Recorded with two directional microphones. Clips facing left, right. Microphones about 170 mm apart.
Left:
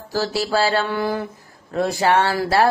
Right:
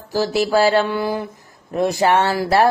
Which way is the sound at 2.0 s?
20° right (ahead or behind).